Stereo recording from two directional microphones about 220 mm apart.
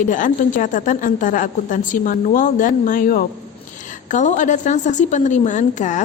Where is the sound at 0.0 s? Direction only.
35° left (ahead or behind).